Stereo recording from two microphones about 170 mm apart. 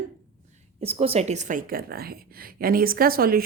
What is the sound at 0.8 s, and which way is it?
A woman's voice, 35° right (ahead or behind).